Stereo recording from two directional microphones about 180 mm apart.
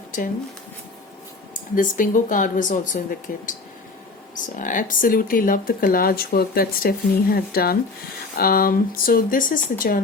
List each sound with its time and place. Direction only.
1.7 s speech: 45° left (ahead or behind)